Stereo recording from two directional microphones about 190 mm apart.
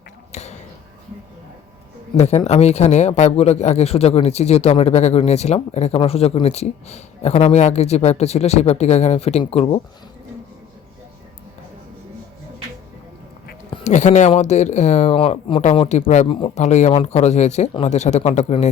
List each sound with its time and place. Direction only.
0.3 s a sound: 35° left (ahead or behind)
2.1 s speech: 35° left (ahead or behind)
13.8 s speech: 40° left (ahead or behind)